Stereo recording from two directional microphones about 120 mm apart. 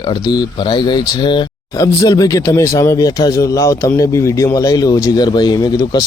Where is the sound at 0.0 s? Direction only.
35° left (ahead or behind).